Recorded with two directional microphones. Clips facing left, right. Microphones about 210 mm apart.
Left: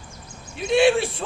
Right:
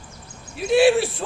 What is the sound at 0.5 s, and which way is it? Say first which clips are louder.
Speech: right 2 dB; 5° right (ahead or behind).